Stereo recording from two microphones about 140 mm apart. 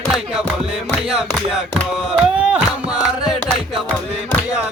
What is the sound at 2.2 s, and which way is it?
Music, 5° right (ahead or behind).